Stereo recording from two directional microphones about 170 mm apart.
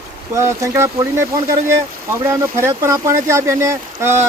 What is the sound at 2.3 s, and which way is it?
Speech, 15° right (ahead or behind).